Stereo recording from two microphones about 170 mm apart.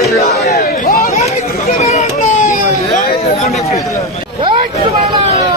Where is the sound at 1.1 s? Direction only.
45° left (ahead or behind).